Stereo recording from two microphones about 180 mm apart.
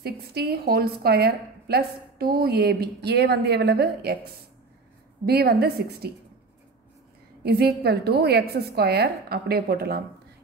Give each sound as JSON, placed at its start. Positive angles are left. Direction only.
{"t": 0.0, "sound": "a woman's voice", "side_deg": -60}
{"t": 7.4, "sound": "a woman's voice", "side_deg": -60}